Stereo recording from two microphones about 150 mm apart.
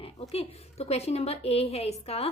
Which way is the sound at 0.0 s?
40° left (ahead or behind).